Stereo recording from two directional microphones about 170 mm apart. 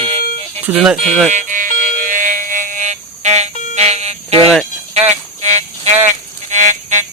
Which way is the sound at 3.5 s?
45° left (ahead or behind).